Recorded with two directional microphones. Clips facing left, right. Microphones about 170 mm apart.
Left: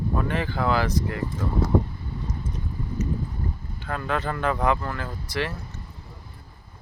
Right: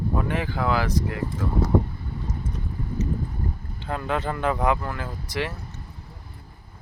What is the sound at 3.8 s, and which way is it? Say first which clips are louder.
Speech: right 1 dB; 15° right (ahead or behind).